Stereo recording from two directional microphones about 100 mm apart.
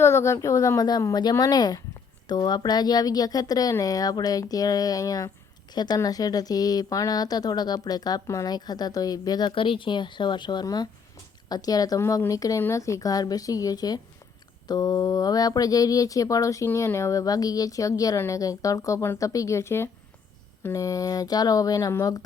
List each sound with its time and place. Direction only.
0.0 s speech: 30° left (ahead or behind)
9.5 s speech: 60° left (ahead or behind); by 22.2 s 35° left (ahead or behind)